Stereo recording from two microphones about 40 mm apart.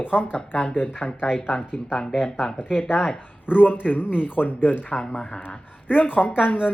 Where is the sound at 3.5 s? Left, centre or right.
Left.